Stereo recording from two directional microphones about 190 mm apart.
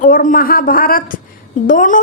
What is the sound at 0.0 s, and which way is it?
A woman's voice, 45° left (ahead or behind).